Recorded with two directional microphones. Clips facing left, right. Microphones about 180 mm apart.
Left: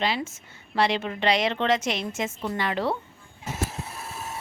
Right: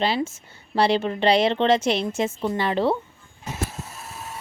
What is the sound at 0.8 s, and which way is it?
A woman's voice, 35° right (ahead or behind).